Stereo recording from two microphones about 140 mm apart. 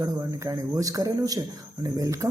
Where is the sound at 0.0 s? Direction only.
25° right (ahead or behind).